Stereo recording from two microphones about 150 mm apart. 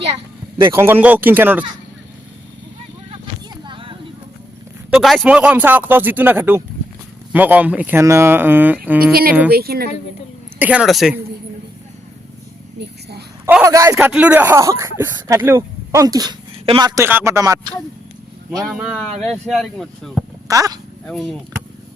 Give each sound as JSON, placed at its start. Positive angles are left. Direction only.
{"t": 0.7, "sound": "speech", "side_deg": -15}
{"t": 3.5, "sound": "a sound", "side_deg": -35}
{"t": 4.9, "sound": "speech", "side_deg": 0}
{"t": 9.5, "sound": "speech", "side_deg": -90}
{"t": 10.6, "sound": "speech", "side_deg": -10}
{"t": 12.8, "sound": "a sound", "side_deg": -90}
{"t": 13.7, "sound": "speech", "side_deg": -20}
{"t": 13.9, "sound": "a man's voice", "side_deg": -5}
{"t": 16.9, "sound": "speech", "side_deg": -15}
{"t": 18.7, "sound": "speech", "side_deg": -5}
{"t": 20.5, "sound": "speech", "side_deg": -20}
{"t": 21.1, "sound": "speech", "side_deg": 0}